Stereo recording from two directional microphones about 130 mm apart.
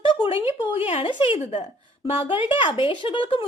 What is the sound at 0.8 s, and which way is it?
Speech, 55° left (ahead or behind).